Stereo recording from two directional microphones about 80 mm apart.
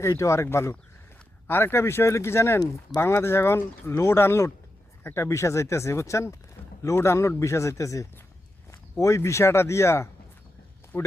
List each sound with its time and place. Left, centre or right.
0.1 s speech: left
10.9 s speech: left